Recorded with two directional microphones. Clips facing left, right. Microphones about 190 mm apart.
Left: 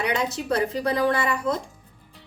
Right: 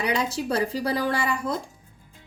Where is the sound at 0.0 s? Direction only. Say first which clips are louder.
Even; 30° right (ahead or behind).